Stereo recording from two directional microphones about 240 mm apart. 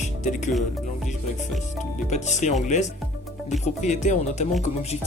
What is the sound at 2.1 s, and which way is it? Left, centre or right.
Speech, left.